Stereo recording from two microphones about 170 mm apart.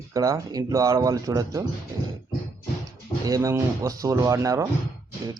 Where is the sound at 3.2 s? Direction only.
20° right (ahead or behind).